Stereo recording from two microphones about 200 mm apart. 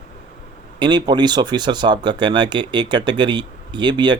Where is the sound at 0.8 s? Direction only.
20° right (ahead or behind).